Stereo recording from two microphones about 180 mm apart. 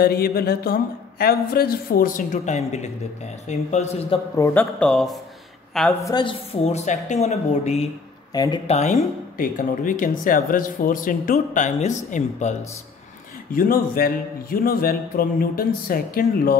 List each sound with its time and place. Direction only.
0.0 s a man's voice: 60° left (ahead or behind); by 4.2 s 40° left (ahead or behind)
4.4 s speech: 10° left (ahead or behind)
6.0 s speech: 25° left (ahead or behind)
8.3 s speech: 20° left (ahead or behind)
8.6 s speech: 40° left (ahead or behind)
13.5 s a man's voice: 55° left (ahead or behind)